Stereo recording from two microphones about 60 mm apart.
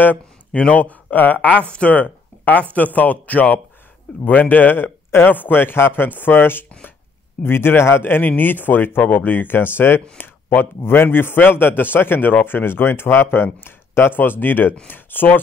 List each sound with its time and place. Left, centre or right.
0.5 s speech: centre